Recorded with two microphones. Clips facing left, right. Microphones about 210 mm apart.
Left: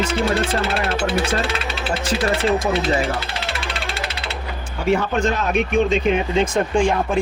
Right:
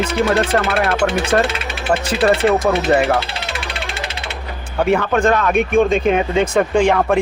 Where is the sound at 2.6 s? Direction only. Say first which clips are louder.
Right 5 dB; 65° right (ahead or behind).